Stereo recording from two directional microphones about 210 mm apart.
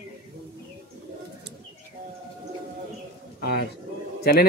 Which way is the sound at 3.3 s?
50° left (ahead or behind).